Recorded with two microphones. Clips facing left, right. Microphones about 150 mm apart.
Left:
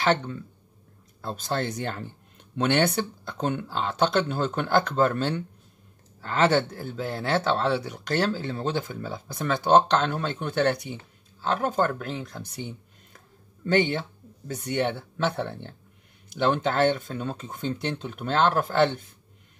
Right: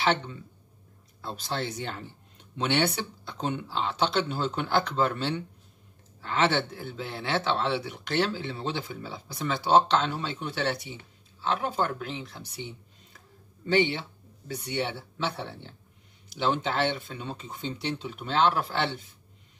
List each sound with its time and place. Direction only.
0.0 s speech: 45° left (ahead or behind)